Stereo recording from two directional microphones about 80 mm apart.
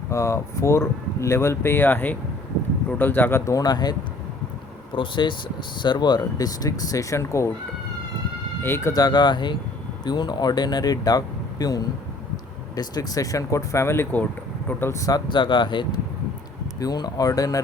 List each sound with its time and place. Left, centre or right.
0.1 s speech: left
3.4 s speech: left
4.9 s speech: left
5.8 s speech: left
8.6 s speech: left
8.9 s speech: left
14.9 s speech: left
15.3 s speech: left
16.8 s speech: left